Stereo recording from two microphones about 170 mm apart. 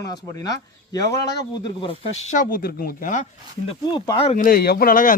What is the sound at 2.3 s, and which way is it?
Speech, 55° left (ahead or behind).